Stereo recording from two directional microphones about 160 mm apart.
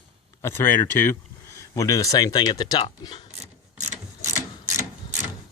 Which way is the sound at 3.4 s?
45° right (ahead or behind).